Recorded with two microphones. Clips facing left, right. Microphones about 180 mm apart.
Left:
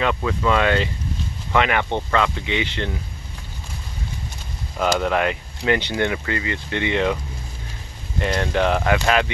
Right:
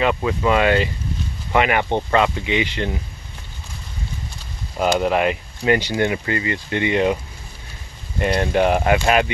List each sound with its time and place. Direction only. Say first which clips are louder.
0.0 s speech: right 2 dB; 10° right (ahead or behind)
4.7 s speech: right 2 dB; 15° right (ahead or behind)
6.1 s speech: right 2 dB; 30° right (ahead or behind)
6.7 s speech: right 3 dB; 10° right (ahead or behind)
8.2 s speech: right 3 dB; 15° right (ahead or behind)